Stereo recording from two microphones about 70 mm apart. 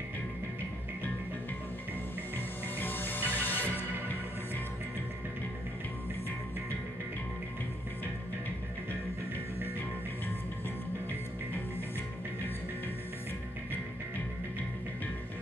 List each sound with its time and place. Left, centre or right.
2.3 s music: left